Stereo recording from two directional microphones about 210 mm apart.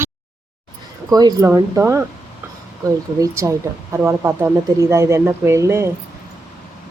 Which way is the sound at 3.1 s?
15° right (ahead or behind).